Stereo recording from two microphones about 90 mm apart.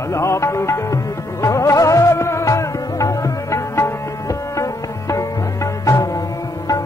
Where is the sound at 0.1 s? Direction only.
30° left (ahead or behind).